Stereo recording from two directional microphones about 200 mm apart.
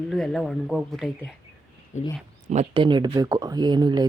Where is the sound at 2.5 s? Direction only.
25° right (ahead or behind).